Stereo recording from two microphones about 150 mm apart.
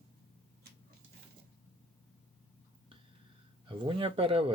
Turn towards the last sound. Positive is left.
turn(degrees=-40)  # may be behind; listen again after turning